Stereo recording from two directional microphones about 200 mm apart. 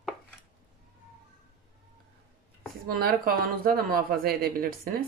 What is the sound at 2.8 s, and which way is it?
Speech, 45° right (ahead or behind).